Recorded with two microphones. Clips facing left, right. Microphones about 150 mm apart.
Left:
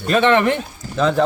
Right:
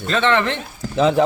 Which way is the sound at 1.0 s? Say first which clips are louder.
Right 1 dB; 15° right (ahead or behind).